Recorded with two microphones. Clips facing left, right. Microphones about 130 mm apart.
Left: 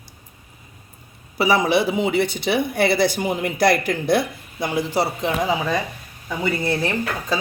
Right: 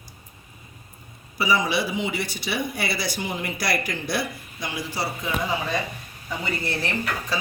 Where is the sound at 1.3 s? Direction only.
60° left (ahead or behind).